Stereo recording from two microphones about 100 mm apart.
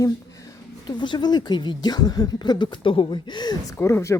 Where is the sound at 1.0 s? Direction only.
50° left (ahead or behind).